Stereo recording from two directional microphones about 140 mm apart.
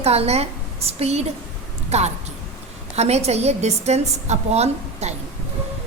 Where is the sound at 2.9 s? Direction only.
50° right (ahead or behind).